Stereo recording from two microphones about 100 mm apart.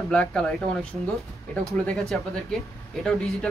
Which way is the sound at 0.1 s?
10° left (ahead or behind).